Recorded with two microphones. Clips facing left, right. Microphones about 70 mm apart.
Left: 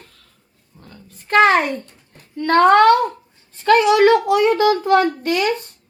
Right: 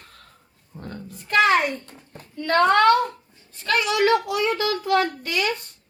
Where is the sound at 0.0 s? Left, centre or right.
Right.